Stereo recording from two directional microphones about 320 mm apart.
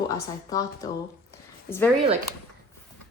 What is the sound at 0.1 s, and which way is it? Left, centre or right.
Speech, centre.